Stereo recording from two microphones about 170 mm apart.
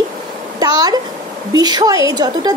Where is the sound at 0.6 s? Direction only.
25° right (ahead or behind).